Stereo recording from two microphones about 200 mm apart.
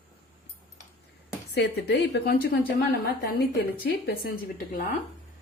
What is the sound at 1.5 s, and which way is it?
A woman's voice, 55° left (ahead or behind).